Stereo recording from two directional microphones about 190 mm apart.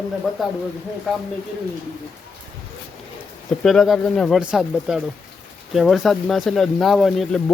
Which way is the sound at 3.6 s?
Centre (ahead or behind).